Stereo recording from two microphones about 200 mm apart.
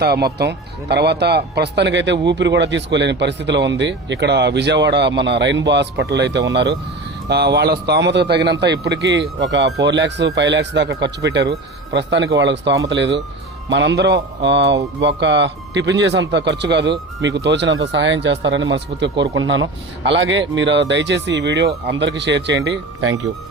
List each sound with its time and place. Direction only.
0.0 s speech: 50° right (ahead or behind); by 19.6 s 75° right (ahead or behind)
20.1 s speech: 65° right (ahead or behind)